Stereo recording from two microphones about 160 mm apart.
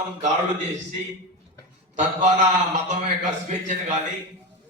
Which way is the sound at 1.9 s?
50° right (ahead or behind).